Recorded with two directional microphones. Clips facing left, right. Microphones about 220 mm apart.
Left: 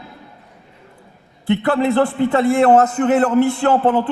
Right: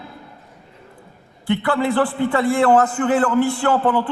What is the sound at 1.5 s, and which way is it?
A man's voice, 25° left (ahead or behind).